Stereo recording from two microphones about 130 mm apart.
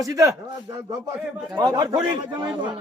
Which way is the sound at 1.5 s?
30° right (ahead or behind).